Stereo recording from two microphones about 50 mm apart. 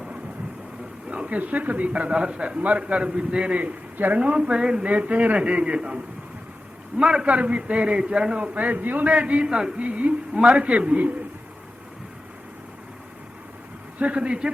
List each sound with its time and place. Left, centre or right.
1.1 s a sound: right
1.4 s a man's voice: right
3.9 s speech: right
4.2 s a man's voice: right
7.0 s a man's voice: centre
8.5 s a man's voice: right; by 9.8 s centre
9.8 s a man's voice: right
14.0 s a man's voice: right